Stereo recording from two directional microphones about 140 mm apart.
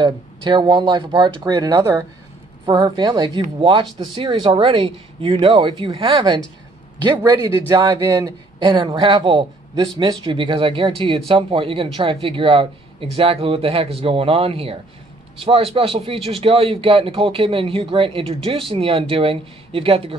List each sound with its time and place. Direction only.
0.0 s a woman's voice: 30° right (ahead or behind)
6.1 s speech: 30° right (ahead or behind)